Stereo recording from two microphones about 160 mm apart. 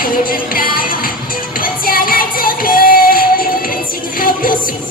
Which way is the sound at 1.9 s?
65° left (ahead or behind).